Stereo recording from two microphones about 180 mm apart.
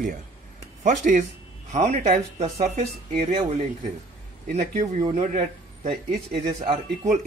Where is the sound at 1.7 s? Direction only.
40° right (ahead or behind).